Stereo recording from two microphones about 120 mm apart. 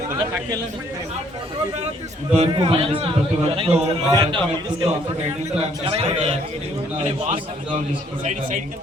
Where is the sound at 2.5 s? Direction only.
45° right (ahead or behind).